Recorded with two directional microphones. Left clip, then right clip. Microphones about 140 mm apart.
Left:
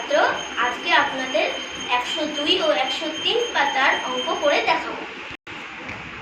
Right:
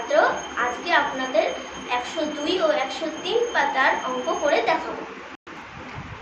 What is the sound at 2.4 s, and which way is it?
A woman's voice, 10° right (ahead or behind).